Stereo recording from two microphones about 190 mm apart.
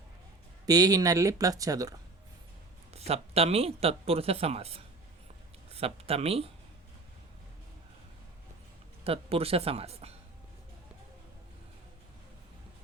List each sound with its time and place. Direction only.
0.6 s speech: 20° right (ahead or behind)
2.9 s speech: 30° right (ahead or behind)
9.0 s speech: 30° right (ahead or behind)